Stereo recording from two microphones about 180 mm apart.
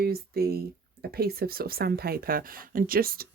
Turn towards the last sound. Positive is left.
turn(degrees=-55)  # may be behind; listen again after turning